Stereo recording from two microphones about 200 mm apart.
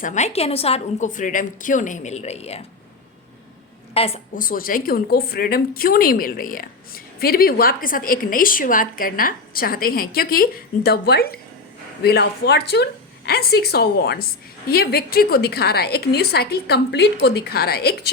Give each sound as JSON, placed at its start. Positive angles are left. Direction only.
{"t": 0.0, "sound": "a woman's voice", "side_deg": 35}
{"t": 3.9, "sound": "a woman's voice", "side_deg": 30}
{"t": 4.4, "sound": "a woman's voice", "side_deg": 45}